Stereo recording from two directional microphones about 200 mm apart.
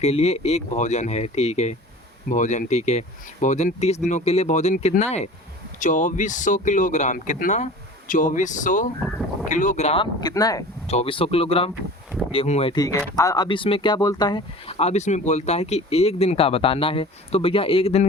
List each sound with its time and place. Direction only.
0.0 s speech: 30° left (ahead or behind)
10.8 s speech: 30° left (ahead or behind)
12.7 s speech: 20° left (ahead or behind)